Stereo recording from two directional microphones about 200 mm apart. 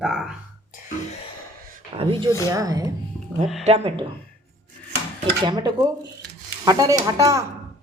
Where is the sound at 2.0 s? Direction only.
25° right (ahead or behind).